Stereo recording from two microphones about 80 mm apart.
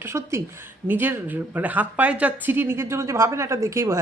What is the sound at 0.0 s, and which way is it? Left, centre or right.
A woman's voice, right.